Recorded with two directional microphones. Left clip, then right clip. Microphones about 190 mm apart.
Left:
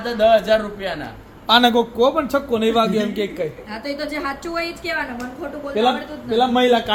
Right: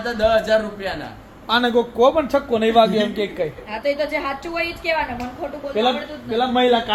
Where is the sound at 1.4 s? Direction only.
55° left (ahead or behind).